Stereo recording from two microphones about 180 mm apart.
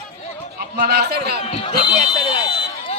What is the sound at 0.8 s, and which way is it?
Speech, 60° right (ahead or behind).